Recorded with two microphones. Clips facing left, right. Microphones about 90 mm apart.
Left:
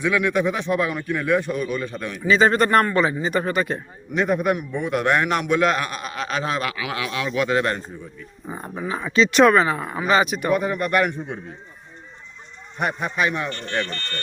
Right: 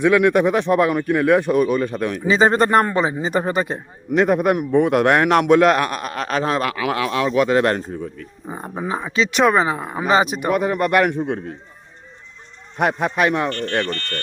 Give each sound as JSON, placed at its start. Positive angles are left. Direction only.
{"t": 0.0, "sound": "speech", "side_deg": -55}
{"t": 2.2, "sound": "speech", "side_deg": -30}
{"t": 4.1, "sound": "a man's voice", "side_deg": -65}
{"t": 8.4, "sound": "speech", "side_deg": -20}
{"t": 8.7, "sound": "speech", "side_deg": -30}
{"t": 9.0, "sound": "speech", "side_deg": -10}
{"t": 10.5, "sound": "speech", "side_deg": -60}
{"t": 12.8, "sound": "speech", "side_deg": -80}
{"t": 13.5, "sound": "speech", "side_deg": 0}